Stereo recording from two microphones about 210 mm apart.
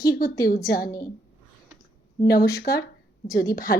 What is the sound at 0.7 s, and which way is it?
Speech, 45° left (ahead or behind).